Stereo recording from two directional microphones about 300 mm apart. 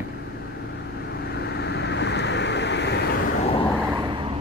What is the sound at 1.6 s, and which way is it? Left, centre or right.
Vehicle, left.